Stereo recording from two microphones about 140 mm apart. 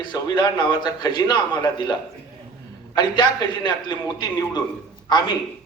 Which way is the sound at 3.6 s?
30° left (ahead or behind).